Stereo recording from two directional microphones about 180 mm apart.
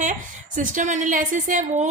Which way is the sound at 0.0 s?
45° right (ahead or behind).